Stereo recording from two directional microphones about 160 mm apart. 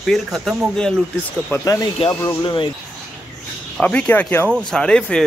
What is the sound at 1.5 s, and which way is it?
Speech, 20° left (ahead or behind).